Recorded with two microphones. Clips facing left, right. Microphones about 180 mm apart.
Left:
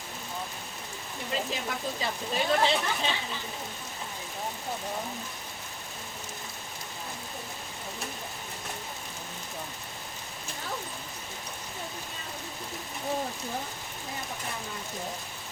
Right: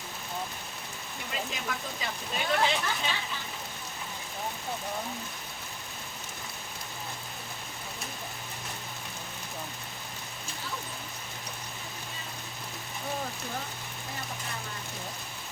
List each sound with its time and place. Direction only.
1.5 s speech: 30° left (ahead or behind)